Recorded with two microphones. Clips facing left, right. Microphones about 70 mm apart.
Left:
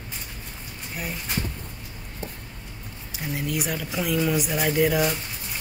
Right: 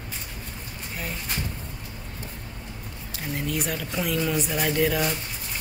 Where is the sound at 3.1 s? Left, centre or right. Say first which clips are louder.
Left 1 dB; centre.